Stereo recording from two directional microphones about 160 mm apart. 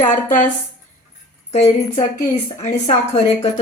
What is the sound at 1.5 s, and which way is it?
Speech, 45° left (ahead or behind).